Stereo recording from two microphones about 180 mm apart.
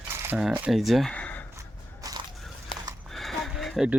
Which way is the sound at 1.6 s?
20° right (ahead or behind).